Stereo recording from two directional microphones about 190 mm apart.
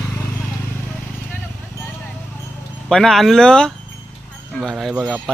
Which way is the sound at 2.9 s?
5° left (ahead or behind).